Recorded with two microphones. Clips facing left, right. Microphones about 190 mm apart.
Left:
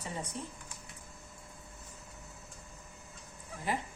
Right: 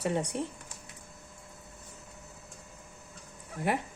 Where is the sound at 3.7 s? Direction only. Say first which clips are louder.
Right 5 dB; 65° right (ahead or behind).